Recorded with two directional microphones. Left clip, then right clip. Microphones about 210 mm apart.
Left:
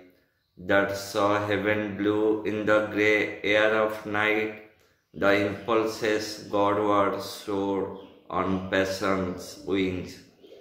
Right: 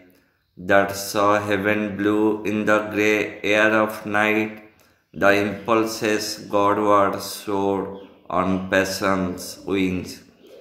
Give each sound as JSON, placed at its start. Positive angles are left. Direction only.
{"t": 0.7, "sound": "mantra", "side_deg": -45}